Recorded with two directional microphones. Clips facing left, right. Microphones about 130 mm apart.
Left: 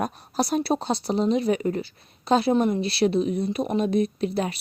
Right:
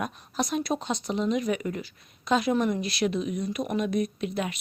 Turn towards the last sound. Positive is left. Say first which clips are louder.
# left 4 dB
turn(degrees=35)  # may be behind; listen again after turning